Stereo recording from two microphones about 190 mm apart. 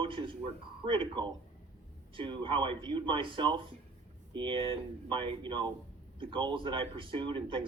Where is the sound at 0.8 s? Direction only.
25° right (ahead or behind).